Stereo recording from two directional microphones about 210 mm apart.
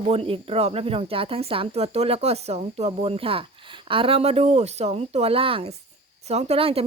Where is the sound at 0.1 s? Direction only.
30° right (ahead or behind).